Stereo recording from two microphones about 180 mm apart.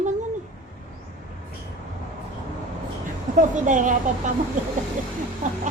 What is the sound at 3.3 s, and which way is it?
A woman's voice, 45° right (ahead or behind).